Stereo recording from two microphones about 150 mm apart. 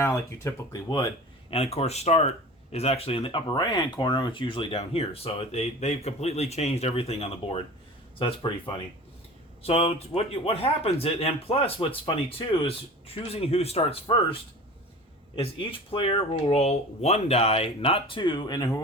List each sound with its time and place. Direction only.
0.0 s speech: 20° left (ahead or behind)
1.5 s speech: 40° left (ahead or behind)
9.6 s speech: 40° left (ahead or behind)
15.4 s speech: 40° left (ahead or behind)